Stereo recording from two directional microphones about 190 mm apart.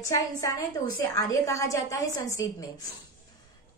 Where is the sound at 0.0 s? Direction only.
15° left (ahead or behind).